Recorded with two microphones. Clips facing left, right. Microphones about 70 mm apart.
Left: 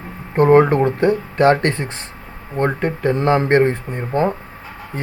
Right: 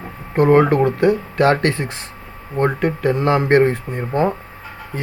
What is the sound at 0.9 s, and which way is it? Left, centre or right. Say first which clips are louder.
Speech: right 1 dB; left.